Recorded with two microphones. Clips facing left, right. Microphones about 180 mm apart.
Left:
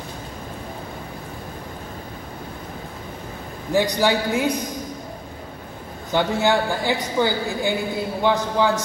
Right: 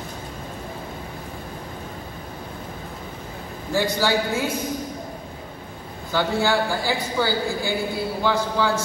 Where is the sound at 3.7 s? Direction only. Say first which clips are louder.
Left 2 dB; 15° left (ahead or behind).